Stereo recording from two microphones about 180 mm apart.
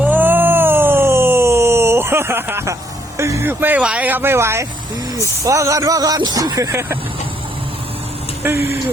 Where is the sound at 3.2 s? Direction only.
15° right (ahead or behind).